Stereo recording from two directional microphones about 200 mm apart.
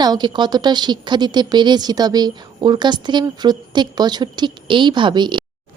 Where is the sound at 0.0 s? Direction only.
20° right (ahead or behind).